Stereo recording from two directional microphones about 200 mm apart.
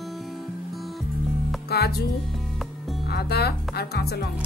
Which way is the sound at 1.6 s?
50° left (ahead or behind).